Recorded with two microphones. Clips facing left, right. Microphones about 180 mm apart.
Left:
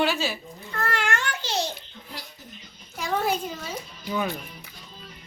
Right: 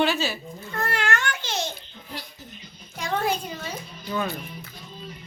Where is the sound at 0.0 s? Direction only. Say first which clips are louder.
Right 1 dB; 10° left (ahead or behind).